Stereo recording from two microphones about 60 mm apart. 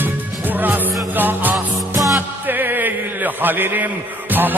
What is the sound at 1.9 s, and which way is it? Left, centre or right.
Music, right.